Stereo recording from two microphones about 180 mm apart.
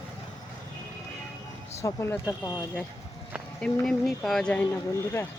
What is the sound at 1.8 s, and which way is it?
Speech, 15° left (ahead or behind).